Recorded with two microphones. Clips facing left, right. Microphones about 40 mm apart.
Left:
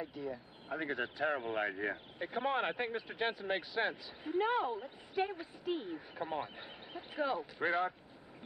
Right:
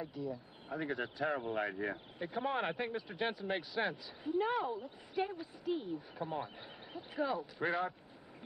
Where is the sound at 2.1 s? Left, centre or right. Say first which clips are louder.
Left 2 dB; centre.